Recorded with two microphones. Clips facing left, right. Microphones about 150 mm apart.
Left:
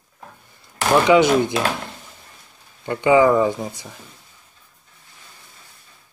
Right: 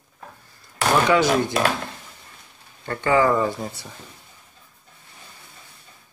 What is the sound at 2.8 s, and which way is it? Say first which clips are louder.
Speech: left 5 dB; 15° left (ahead or behind).